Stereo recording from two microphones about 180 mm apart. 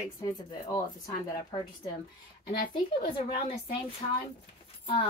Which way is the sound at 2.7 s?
30° left (ahead or behind).